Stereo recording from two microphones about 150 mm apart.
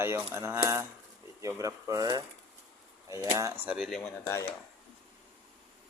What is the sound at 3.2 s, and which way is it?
Speech, 25° right (ahead or behind).